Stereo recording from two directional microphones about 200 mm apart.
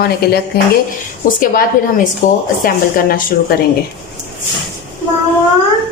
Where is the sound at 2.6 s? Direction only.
45° left (ahead or behind).